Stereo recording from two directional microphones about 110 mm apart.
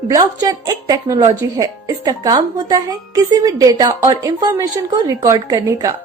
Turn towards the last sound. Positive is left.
turn(degrees=-35)  # may be behind; listen again after turning